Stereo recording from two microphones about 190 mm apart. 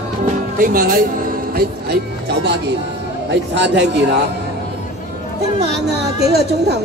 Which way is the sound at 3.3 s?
65° right (ahead or behind).